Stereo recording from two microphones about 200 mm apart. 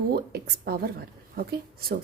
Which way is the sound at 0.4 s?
50° right (ahead or behind).